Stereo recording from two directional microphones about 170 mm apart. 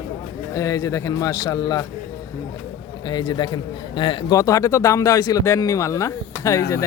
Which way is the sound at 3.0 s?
25° left (ahead or behind).